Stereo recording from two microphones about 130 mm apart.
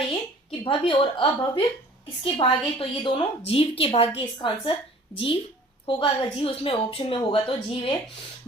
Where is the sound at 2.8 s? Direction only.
40° left (ahead or behind).